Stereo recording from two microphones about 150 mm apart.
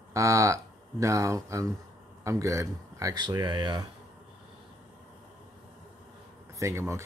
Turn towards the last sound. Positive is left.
turn(degrees=-20)  # may be behind; listen again after turning